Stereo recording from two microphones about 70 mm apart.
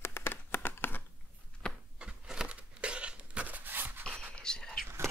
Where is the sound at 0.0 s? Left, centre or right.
Left.